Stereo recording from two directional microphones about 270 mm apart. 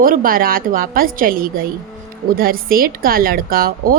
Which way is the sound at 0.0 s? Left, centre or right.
Right.